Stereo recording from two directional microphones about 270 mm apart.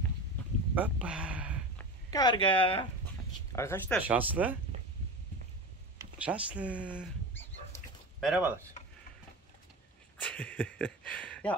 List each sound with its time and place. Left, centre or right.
0.7 s a sound: centre
2.0 s speech: centre
3.5 s speech: centre
4.1 s speech: centre
5.9 s speech: centre
8.2 s speech: centre
10.2 s speech: centre